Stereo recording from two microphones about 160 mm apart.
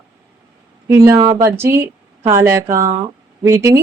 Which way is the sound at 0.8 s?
15° right (ahead or behind).